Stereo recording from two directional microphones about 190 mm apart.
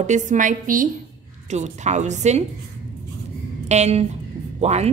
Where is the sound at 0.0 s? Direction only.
40° right (ahead or behind).